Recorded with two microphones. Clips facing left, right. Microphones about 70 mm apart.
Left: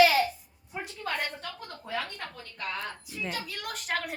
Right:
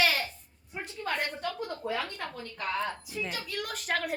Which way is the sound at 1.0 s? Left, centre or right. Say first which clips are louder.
Right 2 dB; centre.